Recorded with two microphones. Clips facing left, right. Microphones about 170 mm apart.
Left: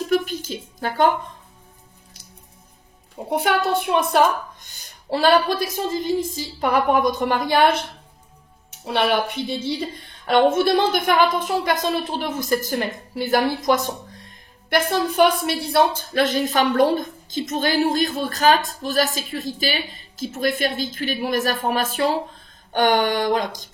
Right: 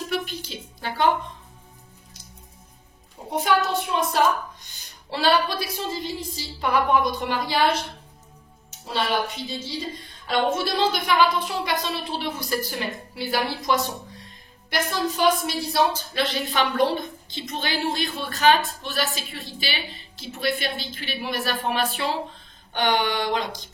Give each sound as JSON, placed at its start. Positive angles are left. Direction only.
{"t": 0.1, "sound": "a sound", "side_deg": 45}
{"t": 3.3, "sound": "a woman's voice", "side_deg": 65}
{"t": 14.7, "sound": "a woman's voice", "side_deg": 60}